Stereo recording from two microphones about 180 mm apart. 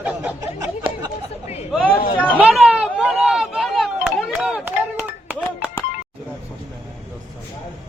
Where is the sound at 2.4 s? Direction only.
Centre (ahead or behind).